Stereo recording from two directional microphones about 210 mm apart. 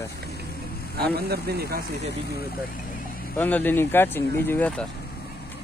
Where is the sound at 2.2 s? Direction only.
50° left (ahead or behind).